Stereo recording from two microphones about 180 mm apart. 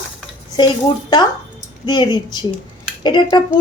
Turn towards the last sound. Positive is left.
turn(degrees=25)  # may be behind; listen again after turning